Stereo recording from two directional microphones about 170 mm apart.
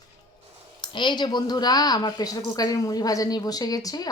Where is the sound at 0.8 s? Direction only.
25° left (ahead or behind).